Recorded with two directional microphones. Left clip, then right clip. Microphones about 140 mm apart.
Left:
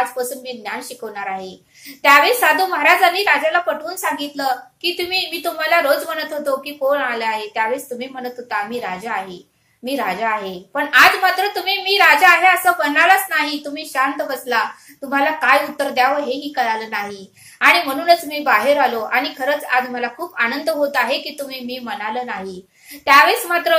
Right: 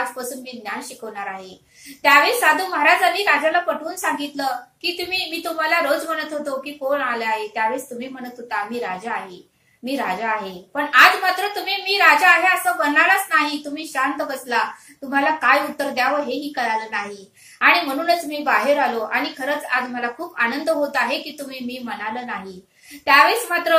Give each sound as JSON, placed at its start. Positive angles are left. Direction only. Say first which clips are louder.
{"t": 0.2, "sound": "a woman's voice", "louder": "left 6 dB", "side_deg": 30}